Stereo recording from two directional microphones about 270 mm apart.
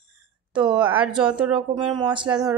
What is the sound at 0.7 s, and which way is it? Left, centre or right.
Speech, centre.